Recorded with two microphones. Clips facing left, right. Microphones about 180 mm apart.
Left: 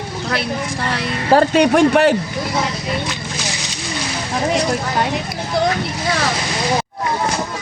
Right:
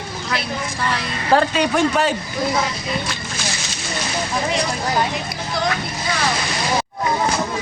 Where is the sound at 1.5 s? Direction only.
60° left (ahead or behind).